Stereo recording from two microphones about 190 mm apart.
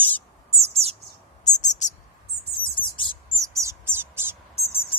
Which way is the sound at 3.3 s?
15° right (ahead or behind).